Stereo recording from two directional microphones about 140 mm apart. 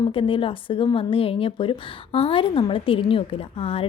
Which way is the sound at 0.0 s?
40° left (ahead or behind).